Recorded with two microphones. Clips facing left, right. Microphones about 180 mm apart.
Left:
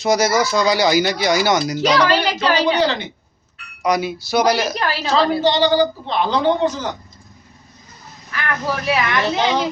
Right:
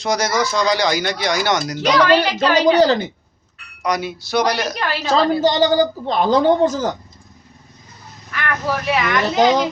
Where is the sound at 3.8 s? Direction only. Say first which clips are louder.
Left 3 dB; 5° left (ahead or behind).